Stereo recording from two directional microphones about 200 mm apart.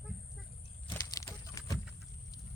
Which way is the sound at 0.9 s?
20° left (ahead or behind).